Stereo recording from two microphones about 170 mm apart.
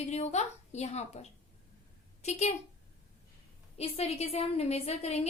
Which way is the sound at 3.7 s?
35° left (ahead or behind).